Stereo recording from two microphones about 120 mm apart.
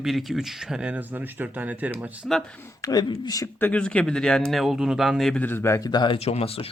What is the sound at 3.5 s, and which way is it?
Speech, 15° left (ahead or behind).